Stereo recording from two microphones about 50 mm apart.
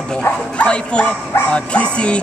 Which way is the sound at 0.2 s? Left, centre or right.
Left.